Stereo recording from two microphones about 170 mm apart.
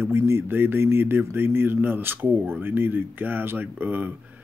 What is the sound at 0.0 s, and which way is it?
Speech, 15° right (ahead or behind).